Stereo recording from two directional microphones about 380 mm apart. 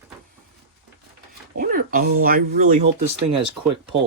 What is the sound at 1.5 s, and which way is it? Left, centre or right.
Speech, right.